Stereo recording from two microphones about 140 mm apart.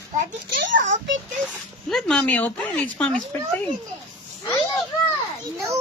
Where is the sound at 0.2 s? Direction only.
65° right (ahead or behind).